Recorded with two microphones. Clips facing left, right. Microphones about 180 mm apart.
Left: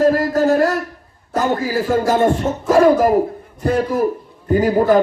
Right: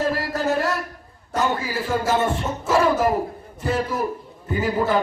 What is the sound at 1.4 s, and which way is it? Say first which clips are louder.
Speech: left 5 dB; 45° left (ahead or behind).